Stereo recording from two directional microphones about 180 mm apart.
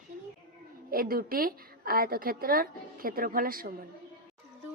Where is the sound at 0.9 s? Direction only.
55° right (ahead or behind).